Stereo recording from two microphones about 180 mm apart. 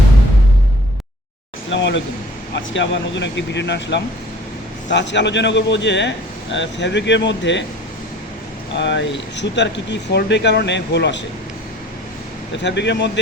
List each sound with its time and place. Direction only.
1.7 s a man's voice: 80° left
8.8 s speech: 80° left
12.6 s speech: 75° left (ahead or behind)